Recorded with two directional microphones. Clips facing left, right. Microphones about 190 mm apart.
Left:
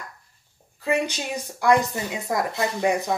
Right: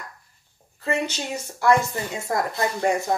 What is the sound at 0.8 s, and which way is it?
A woman's voice, 15° left (ahead or behind).